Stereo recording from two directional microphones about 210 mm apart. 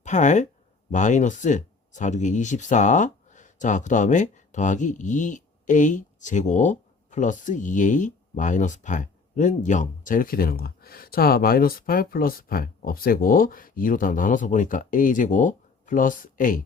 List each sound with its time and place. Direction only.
0.0 s speech: 35° left (ahead or behind)